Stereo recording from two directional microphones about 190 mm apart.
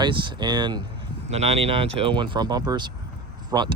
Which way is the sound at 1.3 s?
35° right (ahead or behind).